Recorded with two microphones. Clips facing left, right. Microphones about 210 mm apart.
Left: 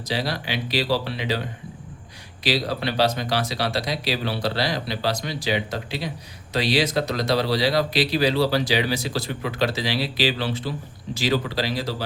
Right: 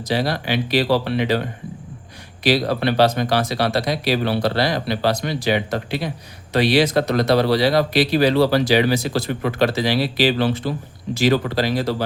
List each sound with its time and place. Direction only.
0.1 s speech: 50° right (ahead or behind)
2.4 s speech: 55° right (ahead or behind)